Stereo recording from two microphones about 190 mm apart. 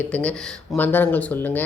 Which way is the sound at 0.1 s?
5° left (ahead or behind).